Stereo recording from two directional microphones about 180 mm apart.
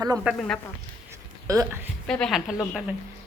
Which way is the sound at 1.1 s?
15° right (ahead or behind).